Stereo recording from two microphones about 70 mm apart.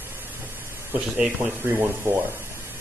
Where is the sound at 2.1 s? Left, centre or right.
Right.